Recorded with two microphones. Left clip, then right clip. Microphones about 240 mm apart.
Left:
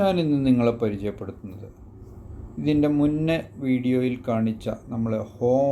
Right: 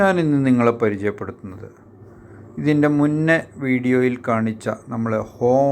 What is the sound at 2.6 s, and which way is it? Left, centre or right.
Speech, centre.